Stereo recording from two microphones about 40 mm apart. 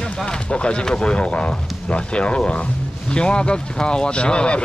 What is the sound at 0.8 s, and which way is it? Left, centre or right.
Speech, centre.